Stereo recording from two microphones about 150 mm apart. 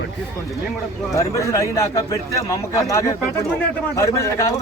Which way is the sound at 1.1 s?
20° left (ahead or behind).